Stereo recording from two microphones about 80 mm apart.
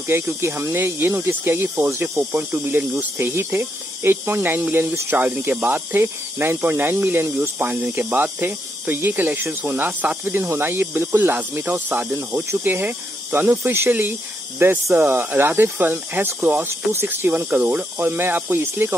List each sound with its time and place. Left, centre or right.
0.0 s speech: right